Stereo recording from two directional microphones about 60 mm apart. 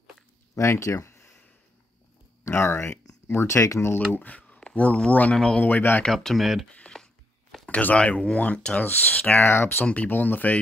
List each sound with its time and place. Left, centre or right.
0.6 s a sound: left
2.4 s speech: left
3.8 s speech: left; by 5.7 s centre
5.7 s speech: left
6.0 s speech: centre
6.8 s a sound: left
7.6 s speech: left
9.3 s speech: left
10.0 s speech: left